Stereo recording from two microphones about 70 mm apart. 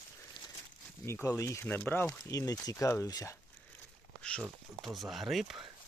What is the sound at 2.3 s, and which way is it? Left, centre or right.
Speech, left.